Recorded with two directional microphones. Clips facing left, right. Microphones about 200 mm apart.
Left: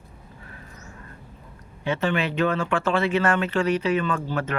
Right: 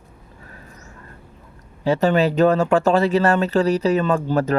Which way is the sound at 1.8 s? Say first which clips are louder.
Right 7 dB; 40° right (ahead or behind).